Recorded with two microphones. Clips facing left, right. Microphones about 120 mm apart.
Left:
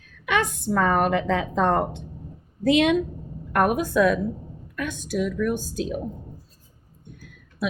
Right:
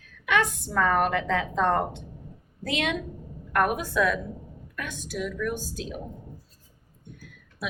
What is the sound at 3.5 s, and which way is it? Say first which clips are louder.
A woman's voice: left 4 dB; 20° left (ahead or behind).